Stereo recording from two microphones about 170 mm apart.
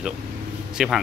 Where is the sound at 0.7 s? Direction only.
5° right (ahead or behind).